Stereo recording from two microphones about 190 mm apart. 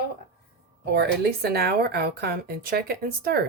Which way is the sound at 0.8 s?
55° right (ahead or behind).